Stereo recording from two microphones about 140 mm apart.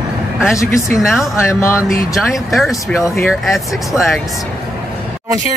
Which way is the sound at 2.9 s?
20° left (ahead or behind).